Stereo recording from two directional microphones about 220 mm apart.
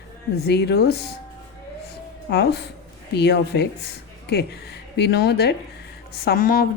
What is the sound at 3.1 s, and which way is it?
Speech, 50° left (ahead or behind).